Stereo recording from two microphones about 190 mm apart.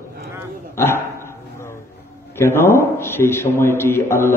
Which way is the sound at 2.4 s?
10° left (ahead or behind).